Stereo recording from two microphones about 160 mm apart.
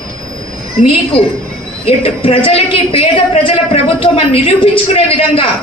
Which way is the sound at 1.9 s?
35° left (ahead or behind).